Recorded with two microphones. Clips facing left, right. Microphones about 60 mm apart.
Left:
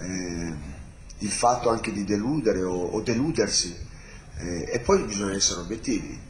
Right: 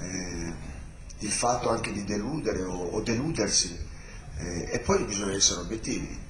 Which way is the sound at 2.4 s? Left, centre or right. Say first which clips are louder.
Left 6 dB; left.